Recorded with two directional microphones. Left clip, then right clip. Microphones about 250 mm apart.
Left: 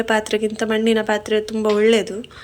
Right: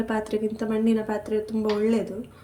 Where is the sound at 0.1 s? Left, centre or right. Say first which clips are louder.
Left 9 dB; centre.